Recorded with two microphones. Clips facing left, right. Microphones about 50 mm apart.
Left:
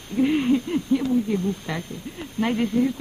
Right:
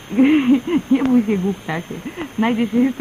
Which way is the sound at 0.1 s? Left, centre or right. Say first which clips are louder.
Right 7 dB; right.